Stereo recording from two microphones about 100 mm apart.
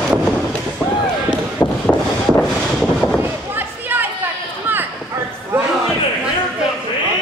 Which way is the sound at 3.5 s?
20° right (ahead or behind).